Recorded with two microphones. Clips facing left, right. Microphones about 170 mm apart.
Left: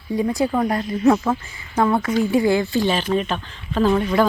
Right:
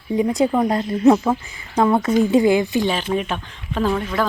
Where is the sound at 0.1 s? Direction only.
20° right (ahead or behind).